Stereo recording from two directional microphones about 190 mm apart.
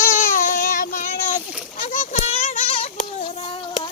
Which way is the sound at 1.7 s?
40° left (ahead or behind).